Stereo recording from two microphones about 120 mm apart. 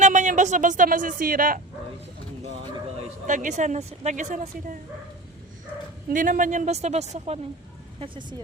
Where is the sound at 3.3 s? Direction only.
85° right.